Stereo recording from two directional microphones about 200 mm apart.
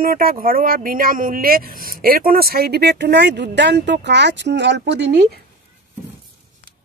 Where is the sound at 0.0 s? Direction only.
45° right (ahead or behind).